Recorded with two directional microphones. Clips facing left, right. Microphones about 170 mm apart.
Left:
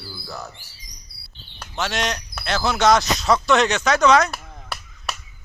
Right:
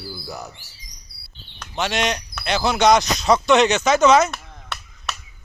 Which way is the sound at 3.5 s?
Centre (ahead or behind).